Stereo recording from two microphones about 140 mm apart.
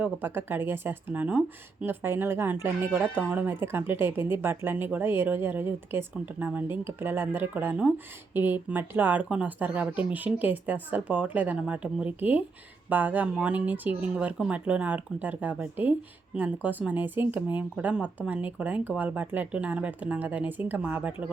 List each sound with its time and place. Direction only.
0.0 s speech: 15° right (ahead or behind)